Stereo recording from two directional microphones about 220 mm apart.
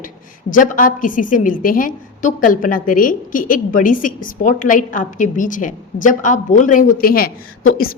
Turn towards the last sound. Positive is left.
turn(degrees=35)  # may be behind; listen again after turning